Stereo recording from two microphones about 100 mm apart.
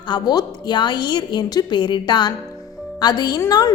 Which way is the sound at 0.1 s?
45° left (ahead or behind).